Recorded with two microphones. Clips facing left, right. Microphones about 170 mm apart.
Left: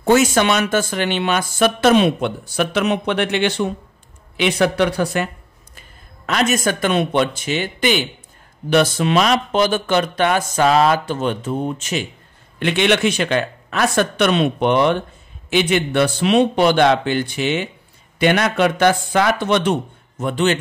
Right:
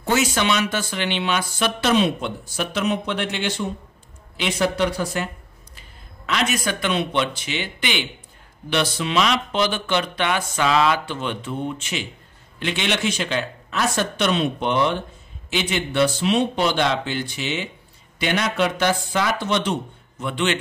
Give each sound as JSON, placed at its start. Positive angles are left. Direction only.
{"t": 0.0, "sound": "speech", "side_deg": 50}
{"t": 5.8, "sound": "speech", "side_deg": 45}
{"t": 12.5, "sound": "speech", "side_deg": 60}